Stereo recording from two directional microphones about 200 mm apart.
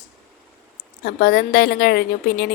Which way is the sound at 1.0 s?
50° left (ahead or behind).